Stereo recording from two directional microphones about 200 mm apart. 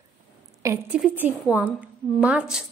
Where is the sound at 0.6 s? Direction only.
15° right (ahead or behind).